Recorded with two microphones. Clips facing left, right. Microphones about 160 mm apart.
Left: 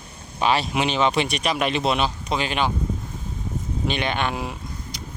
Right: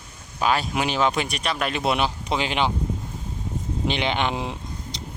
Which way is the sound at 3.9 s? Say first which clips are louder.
Right 1 dB; 15° right (ahead or behind).